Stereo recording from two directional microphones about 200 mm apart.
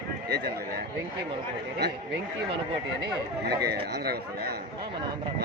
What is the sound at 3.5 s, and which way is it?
Speech, 55° right (ahead or behind).